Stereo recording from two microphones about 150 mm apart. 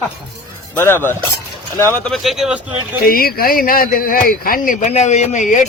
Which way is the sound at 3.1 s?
80° left.